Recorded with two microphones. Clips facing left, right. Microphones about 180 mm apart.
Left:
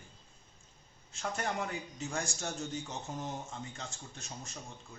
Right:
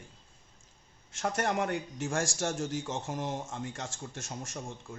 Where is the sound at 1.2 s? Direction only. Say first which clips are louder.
Right 6 dB; 80° right.